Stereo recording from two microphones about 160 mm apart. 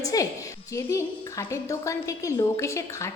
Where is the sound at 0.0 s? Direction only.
20° left (ahead or behind).